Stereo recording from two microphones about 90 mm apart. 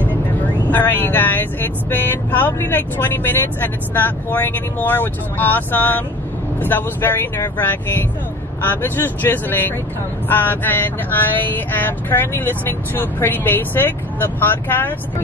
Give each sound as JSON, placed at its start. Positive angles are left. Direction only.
{"t": 0.7, "sound": "speech", "side_deg": 20}